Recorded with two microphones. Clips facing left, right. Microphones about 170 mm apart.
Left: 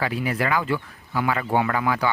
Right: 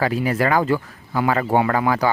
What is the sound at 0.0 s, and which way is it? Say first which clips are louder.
Speech: right 5 dB; 40° right (ahead or behind).